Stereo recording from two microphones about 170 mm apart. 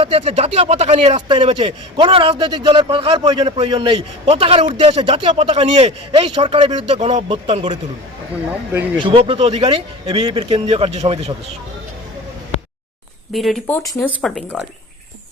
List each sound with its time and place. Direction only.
0.0 s speech: 35° right (ahead or behind)
9.0 s speech: 30° right (ahead or behind)
13.3 s speech: centre (ahead or behind)